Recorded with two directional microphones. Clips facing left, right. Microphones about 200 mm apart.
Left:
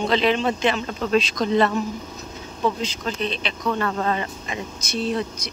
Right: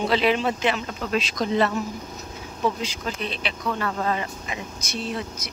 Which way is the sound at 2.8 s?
10° right (ahead or behind).